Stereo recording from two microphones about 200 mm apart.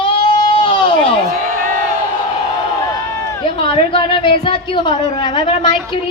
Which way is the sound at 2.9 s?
15° left (ahead or behind).